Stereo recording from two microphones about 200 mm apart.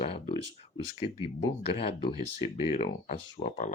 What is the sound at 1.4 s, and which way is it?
Speech, 30° left (ahead or behind).